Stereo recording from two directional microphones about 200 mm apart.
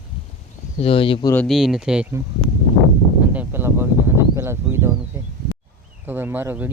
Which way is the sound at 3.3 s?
10° right (ahead or behind).